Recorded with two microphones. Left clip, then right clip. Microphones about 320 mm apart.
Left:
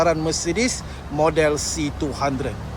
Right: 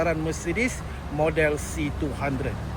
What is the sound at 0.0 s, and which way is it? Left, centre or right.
Speech, centre.